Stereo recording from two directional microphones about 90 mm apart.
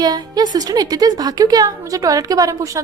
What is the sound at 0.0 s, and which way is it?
A woman's voice, 50° right (ahead or behind).